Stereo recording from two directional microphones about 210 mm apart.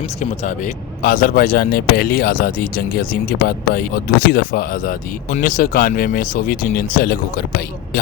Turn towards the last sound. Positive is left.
turn(degrees=45)  # may be behind; listen again after turning